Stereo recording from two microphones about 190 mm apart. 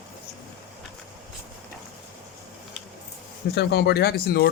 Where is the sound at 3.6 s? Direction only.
60° left (ahead or behind).